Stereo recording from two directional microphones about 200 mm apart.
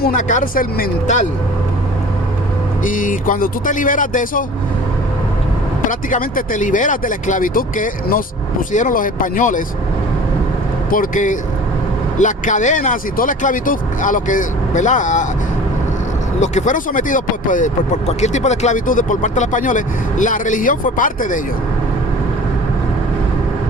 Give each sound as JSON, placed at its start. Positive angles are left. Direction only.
{"t": 0.0, "sound": "speech", "side_deg": 40}
{"t": 2.8, "sound": "speech", "side_deg": 40}
{"t": 5.9, "sound": "speech", "side_deg": 40}
{"t": 10.9, "sound": "speech", "side_deg": 40}
{"t": 16.4, "sound": "speech", "side_deg": 40}